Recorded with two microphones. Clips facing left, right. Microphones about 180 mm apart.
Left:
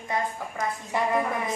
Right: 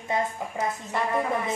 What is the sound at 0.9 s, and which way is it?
Speech, 15° left (ahead or behind).